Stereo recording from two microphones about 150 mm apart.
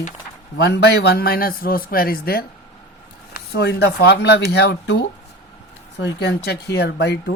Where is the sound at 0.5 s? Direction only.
90° left.